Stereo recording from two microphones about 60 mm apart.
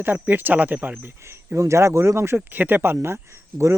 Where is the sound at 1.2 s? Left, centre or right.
Right.